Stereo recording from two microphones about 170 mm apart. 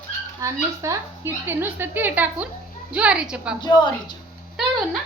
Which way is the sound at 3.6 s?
25° left (ahead or behind).